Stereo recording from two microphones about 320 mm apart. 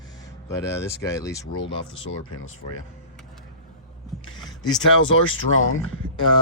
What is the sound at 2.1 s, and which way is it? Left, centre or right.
Speech, left.